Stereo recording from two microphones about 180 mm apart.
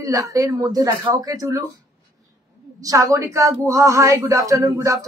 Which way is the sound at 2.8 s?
20° right (ahead or behind).